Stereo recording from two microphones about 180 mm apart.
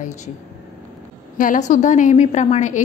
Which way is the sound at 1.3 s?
45° left (ahead or behind).